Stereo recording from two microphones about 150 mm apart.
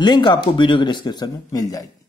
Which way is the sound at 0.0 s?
30° left (ahead or behind).